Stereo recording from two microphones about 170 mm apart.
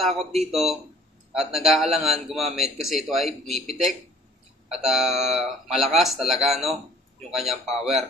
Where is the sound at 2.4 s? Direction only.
40° right (ahead or behind).